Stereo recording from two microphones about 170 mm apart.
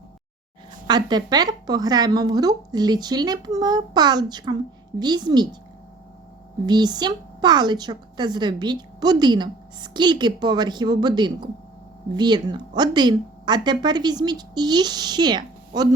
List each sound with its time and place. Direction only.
0.9 s speech: 25° right (ahead or behind)
6.7 s speech: 25° right (ahead or behind)